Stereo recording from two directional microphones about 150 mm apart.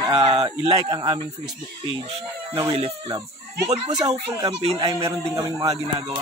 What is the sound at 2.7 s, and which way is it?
Speech, 40° right (ahead or behind).